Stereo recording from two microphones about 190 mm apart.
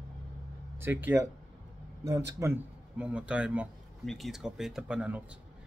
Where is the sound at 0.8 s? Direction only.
10° right (ahead or behind).